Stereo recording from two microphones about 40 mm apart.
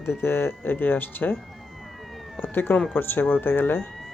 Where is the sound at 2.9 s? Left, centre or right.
Left.